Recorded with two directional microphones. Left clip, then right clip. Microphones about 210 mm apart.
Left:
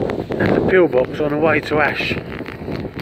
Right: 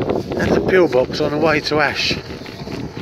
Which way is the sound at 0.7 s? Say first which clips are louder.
Even; 30° right (ahead or behind).